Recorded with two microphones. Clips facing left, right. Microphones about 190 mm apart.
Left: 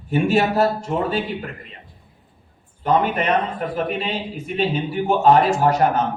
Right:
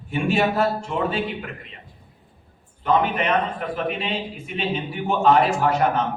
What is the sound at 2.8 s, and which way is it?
A man's voice, 40° left (ahead or behind).